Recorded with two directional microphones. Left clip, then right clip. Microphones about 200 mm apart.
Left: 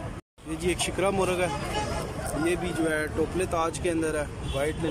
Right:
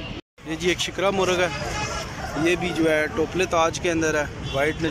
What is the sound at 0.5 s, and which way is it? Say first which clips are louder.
Speech: right 4 dB; 5° left (ahead or behind).